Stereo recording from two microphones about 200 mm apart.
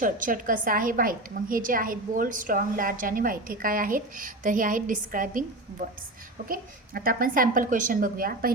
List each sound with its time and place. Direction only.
0.0 s a woman's voice: 45° right (ahead or behind)
6.5 s a woman's voice: 45° right (ahead or behind)